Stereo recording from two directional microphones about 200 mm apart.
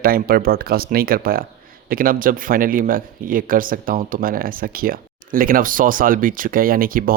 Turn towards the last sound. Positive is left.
turn(degrees=-45)  # may be behind; listen again after turning